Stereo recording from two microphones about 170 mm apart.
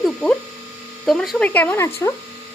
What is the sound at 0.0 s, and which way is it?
Mains hum, 5° left (ahead or behind).